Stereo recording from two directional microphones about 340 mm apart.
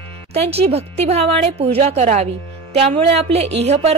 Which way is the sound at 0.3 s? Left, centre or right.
Centre.